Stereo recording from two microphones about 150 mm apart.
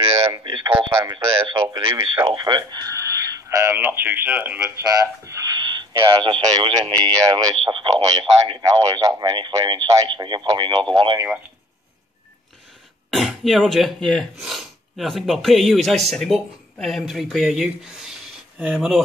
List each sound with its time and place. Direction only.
0.3 s speech: 30° right (ahead or behind)
13.1 s speech: centre (ahead or behind)